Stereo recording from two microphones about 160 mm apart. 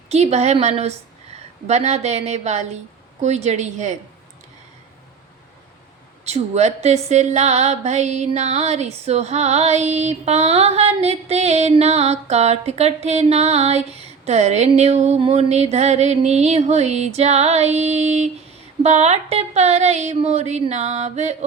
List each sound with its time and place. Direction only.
0.1 s a woman's voice: 40° right (ahead or behind)
6.2 s speech: 45° right (ahead or behind)